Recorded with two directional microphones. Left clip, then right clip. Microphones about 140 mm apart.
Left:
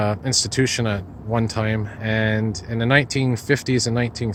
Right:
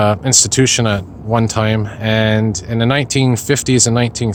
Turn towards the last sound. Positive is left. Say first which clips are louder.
# right 8 dB
turn(degrees=-25)  # may be behind; listen again after turning